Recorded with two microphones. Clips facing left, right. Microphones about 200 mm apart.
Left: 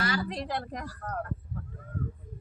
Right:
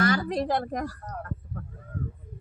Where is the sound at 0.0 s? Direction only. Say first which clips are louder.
Right 7 dB; 50° right (ahead or behind).